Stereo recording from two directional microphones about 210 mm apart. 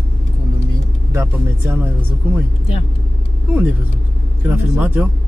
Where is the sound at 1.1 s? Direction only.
10° right (ahead or behind).